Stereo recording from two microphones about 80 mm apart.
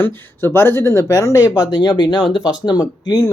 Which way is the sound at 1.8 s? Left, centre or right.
Left.